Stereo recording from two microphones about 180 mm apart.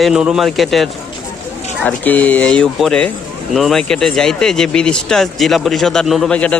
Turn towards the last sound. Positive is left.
turn(degrees=5)  # may be behind; listen again after turning